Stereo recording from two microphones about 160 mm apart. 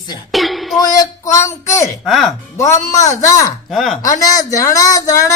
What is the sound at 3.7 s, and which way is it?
Speech, 5° left (ahead or behind).